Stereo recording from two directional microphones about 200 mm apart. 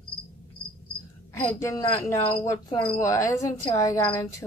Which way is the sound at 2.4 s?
20° left (ahead or behind).